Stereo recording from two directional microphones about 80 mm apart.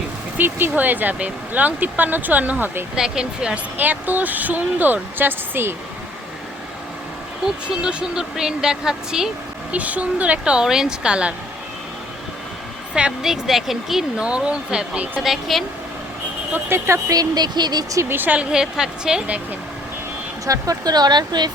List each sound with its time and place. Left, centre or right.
0.3 s speech: right
2.9 s a woman's voice: centre
3.8 s speech: right
7.4 s a woman's voice: centre
9.7 s a woman's voice: centre
12.9 s a woman's voice: centre
16.5 s speech: right
17.2 s speech: right
18.1 s speech: right
18.5 s a woman's voice: centre
20.5 s speech: right